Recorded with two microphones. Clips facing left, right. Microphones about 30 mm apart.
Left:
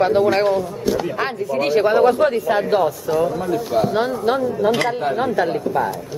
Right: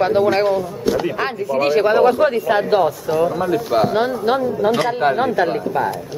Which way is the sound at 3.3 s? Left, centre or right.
Right.